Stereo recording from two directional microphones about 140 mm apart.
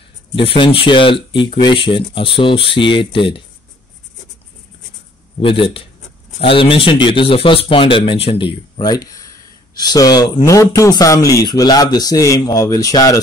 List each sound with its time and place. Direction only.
0.4 s speech: 40° left (ahead or behind)
5.4 s speech: 40° left (ahead or behind); by 13.2 s 25° left (ahead or behind)